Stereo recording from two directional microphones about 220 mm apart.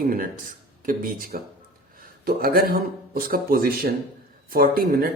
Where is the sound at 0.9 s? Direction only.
40° right (ahead or behind).